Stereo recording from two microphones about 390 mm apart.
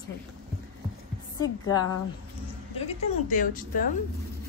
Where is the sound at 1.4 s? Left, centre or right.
Centre.